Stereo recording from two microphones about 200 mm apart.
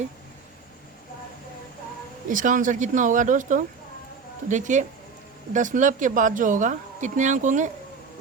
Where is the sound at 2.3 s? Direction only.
40° right (ahead or behind).